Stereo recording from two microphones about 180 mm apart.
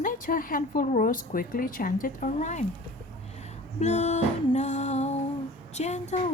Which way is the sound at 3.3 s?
40° left (ahead or behind).